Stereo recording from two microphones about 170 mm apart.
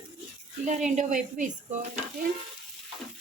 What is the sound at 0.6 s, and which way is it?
Speech, 45° right (ahead or behind).